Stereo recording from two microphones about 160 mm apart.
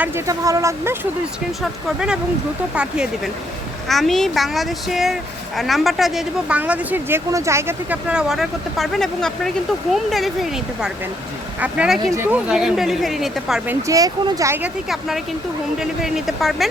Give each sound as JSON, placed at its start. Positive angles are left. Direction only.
{"t": 0.3, "sound": "speech", "side_deg": -20}
{"t": 1.6, "sound": "speech", "side_deg": -5}
{"t": 3.8, "sound": "speech", "side_deg": 0}
{"t": 13.7, "sound": "speech", "side_deg": -20}
{"t": 14.8, "sound": "speech", "side_deg": 0}